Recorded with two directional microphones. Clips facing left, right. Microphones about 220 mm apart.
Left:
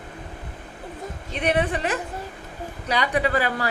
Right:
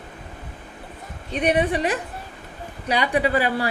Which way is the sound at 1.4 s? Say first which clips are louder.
Right 3 dB; 15° right (ahead or behind).